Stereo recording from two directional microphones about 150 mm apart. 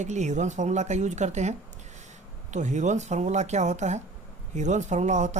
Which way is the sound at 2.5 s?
55° right (ahead or behind).